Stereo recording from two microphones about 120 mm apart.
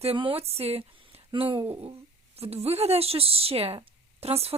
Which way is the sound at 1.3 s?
45° right (ahead or behind).